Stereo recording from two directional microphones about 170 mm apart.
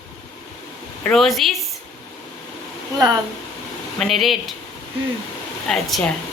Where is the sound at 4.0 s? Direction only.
Centre (ahead or behind).